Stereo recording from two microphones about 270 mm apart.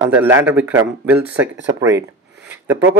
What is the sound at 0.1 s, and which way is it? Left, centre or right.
Speech, centre.